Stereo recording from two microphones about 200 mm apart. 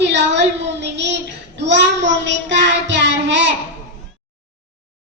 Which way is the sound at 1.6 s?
60° right (ahead or behind).